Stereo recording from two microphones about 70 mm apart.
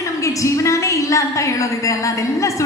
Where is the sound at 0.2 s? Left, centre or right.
Left.